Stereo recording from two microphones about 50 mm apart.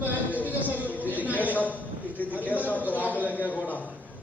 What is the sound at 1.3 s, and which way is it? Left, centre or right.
Speech, left.